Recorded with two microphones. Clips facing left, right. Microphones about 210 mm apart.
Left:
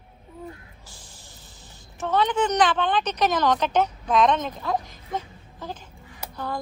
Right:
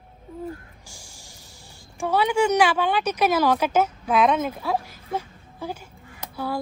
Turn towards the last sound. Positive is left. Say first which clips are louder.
# right 3 dB
turn(degrees=-10)  # may be behind; listen again after turning